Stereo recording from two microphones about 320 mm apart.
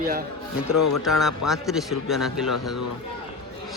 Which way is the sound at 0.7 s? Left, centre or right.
Left.